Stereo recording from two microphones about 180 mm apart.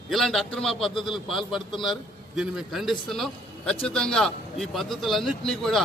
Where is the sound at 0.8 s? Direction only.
25° left (ahead or behind).